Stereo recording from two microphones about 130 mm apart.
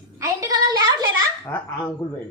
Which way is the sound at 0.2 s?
25° right (ahead or behind).